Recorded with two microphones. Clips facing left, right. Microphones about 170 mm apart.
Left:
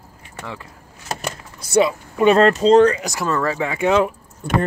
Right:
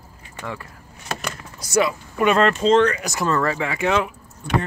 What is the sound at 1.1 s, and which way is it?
Vehicle, 35° left (ahead or behind).